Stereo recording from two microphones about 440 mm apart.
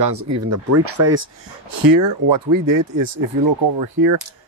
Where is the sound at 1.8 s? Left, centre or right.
Right.